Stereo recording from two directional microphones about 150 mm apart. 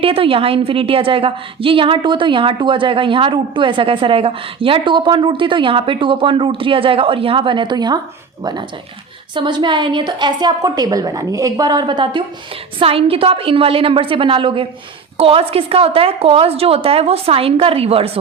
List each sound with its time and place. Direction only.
0.0 s a woman's voice: 40° right (ahead or behind)
9.3 s a woman's voice: 30° right (ahead or behind)